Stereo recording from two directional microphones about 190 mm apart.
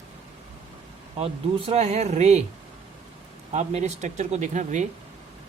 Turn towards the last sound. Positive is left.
turn(degrees=-40)  # may be behind; listen again after turning